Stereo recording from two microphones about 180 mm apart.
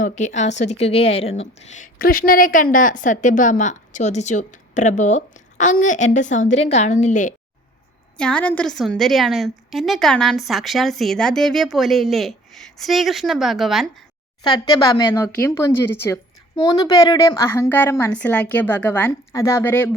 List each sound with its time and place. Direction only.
0.0 s a woman's voice: 40° left (ahead or behind)
8.2 s a woman's voice: 5° left (ahead or behind)
14.4 s a woman's voice: 25° left (ahead or behind)